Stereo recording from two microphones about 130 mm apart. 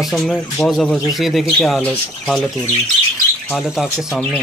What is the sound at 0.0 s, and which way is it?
Speech, centre (ahead or behind).